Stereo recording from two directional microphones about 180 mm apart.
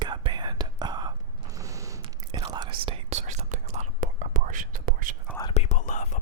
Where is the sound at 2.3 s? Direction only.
25° right (ahead or behind); by 5.1 s 50° right (ahead or behind).